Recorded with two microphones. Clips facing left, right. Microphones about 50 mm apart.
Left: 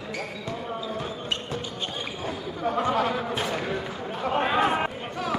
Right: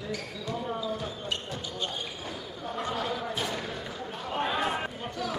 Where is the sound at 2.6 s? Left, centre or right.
Left.